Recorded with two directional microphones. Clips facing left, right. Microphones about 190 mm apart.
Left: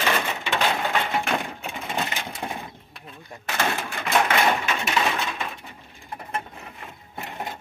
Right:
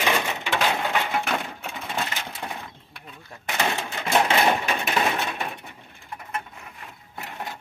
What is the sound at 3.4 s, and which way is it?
Cash register, 15° right (ahead or behind).